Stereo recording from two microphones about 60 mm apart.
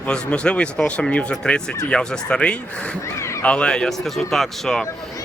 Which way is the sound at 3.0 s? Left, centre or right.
Left.